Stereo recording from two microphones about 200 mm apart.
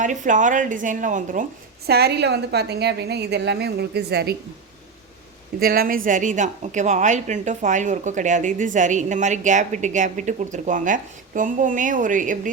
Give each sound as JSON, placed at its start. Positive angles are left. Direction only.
{"t": 0.0, "sound": "a woman's voice", "side_deg": -40}
{"t": 1.9, "sound": "a woman's voice", "side_deg": -55}
{"t": 5.5, "sound": "a woman's voice", "side_deg": -50}